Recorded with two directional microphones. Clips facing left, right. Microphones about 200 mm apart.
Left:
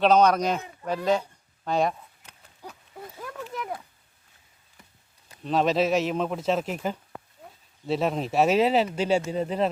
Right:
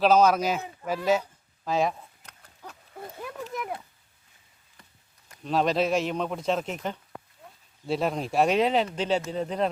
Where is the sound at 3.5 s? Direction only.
10° right (ahead or behind).